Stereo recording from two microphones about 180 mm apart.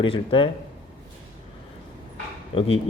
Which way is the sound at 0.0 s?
30° left (ahead or behind).